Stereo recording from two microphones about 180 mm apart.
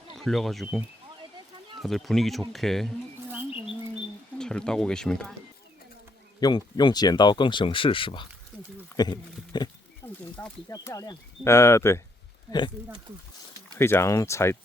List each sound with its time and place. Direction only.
0.2 s speech: centre (ahead or behind)
4.4 s speech: 5° left (ahead or behind)
6.4 s speech: 25° left (ahead or behind)
10.0 s wild animals: 10° left (ahead or behind)
10.7 s speech: 20° left (ahead or behind)
13.7 s speech: 15° left (ahead or behind)